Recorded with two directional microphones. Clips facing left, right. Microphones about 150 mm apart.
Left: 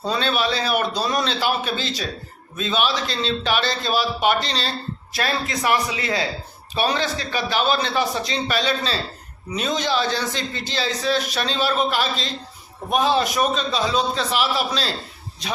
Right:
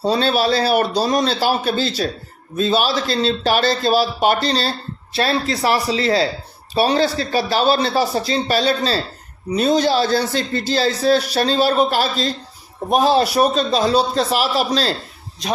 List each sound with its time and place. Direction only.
0.0 s a man's voice: 35° right (ahead or behind)